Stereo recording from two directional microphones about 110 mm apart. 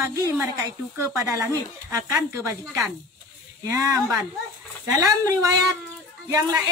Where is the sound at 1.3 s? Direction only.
30° right (ahead or behind).